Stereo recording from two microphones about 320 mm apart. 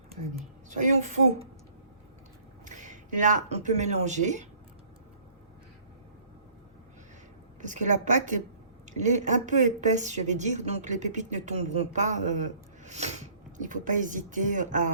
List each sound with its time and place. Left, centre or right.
0.7 s a woman's voice: right
2.6 s speech: right
7.6 s a woman's voice: right